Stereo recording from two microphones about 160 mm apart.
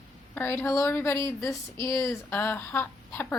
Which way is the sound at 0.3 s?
15° left (ahead or behind).